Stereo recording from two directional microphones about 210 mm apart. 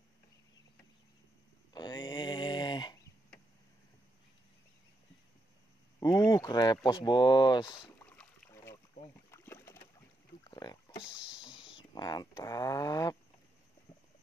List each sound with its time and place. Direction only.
1.7 s a sound: 20° left (ahead or behind)
5.9 s speech: 15° left (ahead or behind)
8.0 s rowboat: 5° left (ahead or behind)
9.3 s a sound: 10° left (ahead or behind)
11.1 s rowboat: 5° right (ahead or behind)
11.5 s speech: 25° left (ahead or behind)